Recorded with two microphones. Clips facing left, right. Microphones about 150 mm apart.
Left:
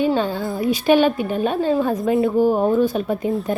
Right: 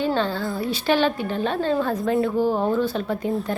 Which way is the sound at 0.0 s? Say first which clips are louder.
Left 3 dB; 15° left (ahead or behind).